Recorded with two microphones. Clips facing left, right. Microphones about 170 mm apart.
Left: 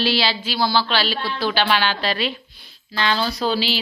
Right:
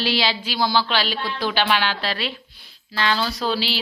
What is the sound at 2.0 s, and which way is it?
A woman's voice, 5° right (ahead or behind).